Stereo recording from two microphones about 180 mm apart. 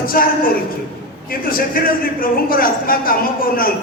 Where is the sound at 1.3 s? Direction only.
55° left (ahead or behind).